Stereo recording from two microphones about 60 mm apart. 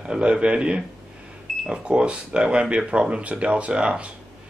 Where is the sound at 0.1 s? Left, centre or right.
Centre.